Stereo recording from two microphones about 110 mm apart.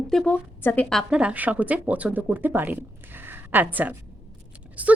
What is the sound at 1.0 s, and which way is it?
A woman's voice, 10° right (ahead or behind).